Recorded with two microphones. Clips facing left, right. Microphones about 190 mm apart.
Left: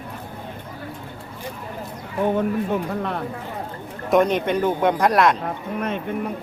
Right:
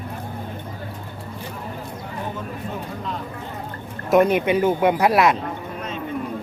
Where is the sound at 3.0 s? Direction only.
65° left (ahead or behind).